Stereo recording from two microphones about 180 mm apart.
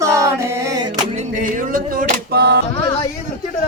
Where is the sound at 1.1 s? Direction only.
45° right (ahead or behind); by 2.6 s 65° right (ahead or behind).